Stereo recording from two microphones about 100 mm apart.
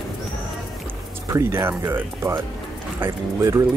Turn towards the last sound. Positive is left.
turn(degrees=-25)  # may be behind; listen again after turning